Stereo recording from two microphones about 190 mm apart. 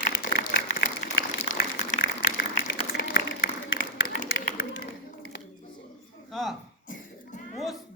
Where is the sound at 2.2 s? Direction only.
50° left (ahead or behind).